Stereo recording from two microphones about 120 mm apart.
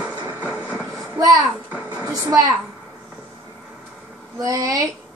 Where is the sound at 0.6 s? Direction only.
15° right (ahead or behind).